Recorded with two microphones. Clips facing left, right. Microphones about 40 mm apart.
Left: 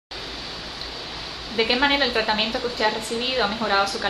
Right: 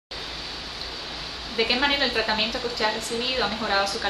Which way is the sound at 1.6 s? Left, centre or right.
Centre.